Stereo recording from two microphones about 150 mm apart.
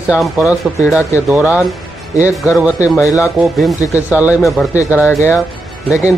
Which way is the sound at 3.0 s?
20° left (ahead or behind).